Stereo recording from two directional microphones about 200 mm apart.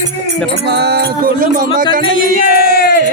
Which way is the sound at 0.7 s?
55° right (ahead or behind).